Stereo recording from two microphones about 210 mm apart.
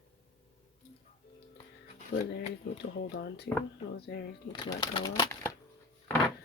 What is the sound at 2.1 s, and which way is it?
Speech, 50° left (ahead or behind).